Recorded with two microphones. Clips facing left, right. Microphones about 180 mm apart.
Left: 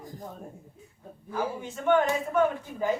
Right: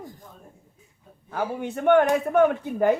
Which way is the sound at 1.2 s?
60° right (ahead or behind).